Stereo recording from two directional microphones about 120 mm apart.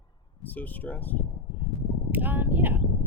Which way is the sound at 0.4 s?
15° left (ahead or behind).